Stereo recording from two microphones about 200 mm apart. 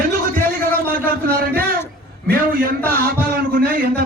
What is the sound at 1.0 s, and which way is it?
A man's voice, 45° right (ahead or behind).